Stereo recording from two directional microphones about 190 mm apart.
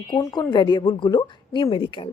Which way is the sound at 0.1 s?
20° left (ahead or behind).